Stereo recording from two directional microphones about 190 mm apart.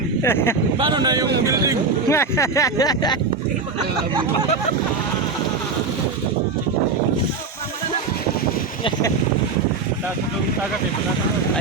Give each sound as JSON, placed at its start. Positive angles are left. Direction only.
{"t": 0.3, "sound": "speech", "side_deg": 10}
{"t": 0.8, "sound": "speech", "side_deg": -25}
{"t": 1.5, "sound": "vehicle", "side_deg": -15}
{"t": 2.0, "sound": "speech", "side_deg": 15}